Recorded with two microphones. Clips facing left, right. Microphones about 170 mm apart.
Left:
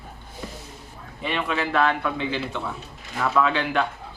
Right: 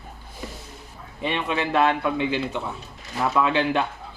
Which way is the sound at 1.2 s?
20° right (ahead or behind).